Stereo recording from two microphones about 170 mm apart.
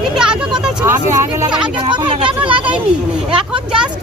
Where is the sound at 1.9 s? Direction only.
30° right (ahead or behind).